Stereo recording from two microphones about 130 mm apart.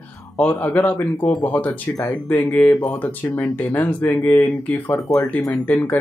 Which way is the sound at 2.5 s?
10° left (ahead or behind).